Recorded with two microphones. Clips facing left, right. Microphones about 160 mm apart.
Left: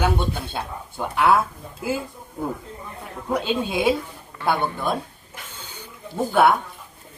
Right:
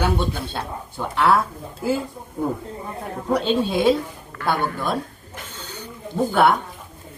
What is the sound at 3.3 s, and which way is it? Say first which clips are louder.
A man's voice: right 3 dB; 5° left (ahead or behind).